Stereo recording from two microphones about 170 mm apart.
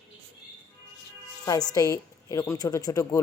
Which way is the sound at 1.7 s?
20° left (ahead or behind).